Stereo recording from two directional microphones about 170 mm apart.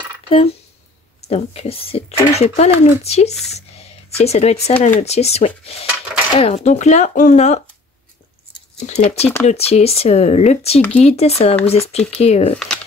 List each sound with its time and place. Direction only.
0.3 s speech: 35° left (ahead or behind)
8.7 s speech: 40° left (ahead or behind)
12.5 s speech: 5° left (ahead or behind)